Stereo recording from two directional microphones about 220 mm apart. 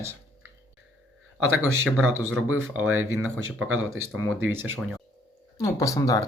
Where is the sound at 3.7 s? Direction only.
70° right (ahead or behind).